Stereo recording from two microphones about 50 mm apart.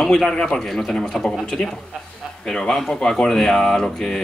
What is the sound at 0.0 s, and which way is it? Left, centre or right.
Speech, centre.